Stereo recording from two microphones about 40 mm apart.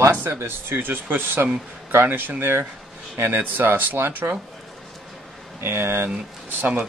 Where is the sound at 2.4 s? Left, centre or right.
Right.